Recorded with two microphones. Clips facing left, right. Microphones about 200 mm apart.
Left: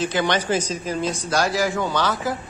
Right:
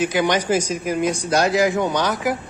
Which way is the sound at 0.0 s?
10° right (ahead or behind).